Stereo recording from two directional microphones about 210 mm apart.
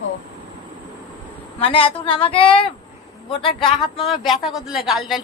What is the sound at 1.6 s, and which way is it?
A woman's voice, 25° left (ahead or behind).